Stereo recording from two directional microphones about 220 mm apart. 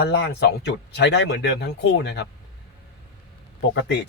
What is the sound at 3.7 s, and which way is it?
Speech, 50° left (ahead or behind).